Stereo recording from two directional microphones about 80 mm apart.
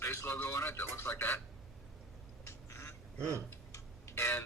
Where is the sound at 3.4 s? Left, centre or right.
Left.